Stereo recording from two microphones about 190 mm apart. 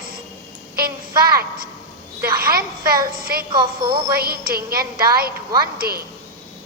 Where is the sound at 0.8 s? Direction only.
50° right (ahead or behind).